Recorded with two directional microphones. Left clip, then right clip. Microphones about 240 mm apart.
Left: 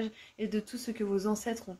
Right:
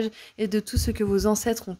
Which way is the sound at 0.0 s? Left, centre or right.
Right.